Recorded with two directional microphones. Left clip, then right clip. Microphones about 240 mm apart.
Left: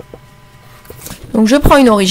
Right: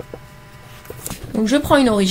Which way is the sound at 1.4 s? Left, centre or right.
Left.